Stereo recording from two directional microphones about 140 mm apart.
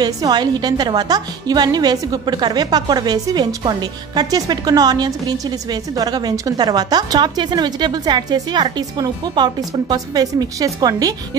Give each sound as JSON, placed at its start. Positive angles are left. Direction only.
{"t": 0.0, "sound": "a woman's voice", "side_deg": -30}